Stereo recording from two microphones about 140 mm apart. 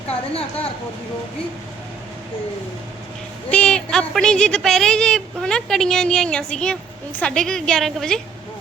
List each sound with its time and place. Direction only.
0.1 s a woman's voice: 45° left (ahead or behind)
3.5 s a woman's voice: 5° left (ahead or behind)